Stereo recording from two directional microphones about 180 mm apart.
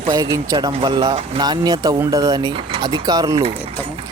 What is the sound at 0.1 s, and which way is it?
Speech, 20° right (ahead or behind).